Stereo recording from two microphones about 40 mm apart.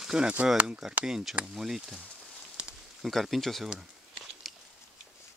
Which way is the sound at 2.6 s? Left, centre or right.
Centre.